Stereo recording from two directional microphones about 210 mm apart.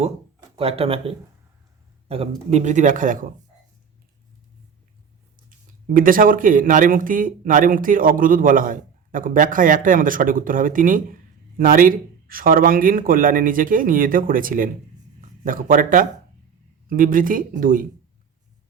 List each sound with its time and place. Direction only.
0.5 s speech: 25° right (ahead or behind)
5.5 s speech: 40° right (ahead or behind)